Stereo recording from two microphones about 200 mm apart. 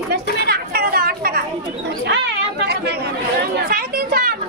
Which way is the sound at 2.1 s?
60° right (ahead or behind).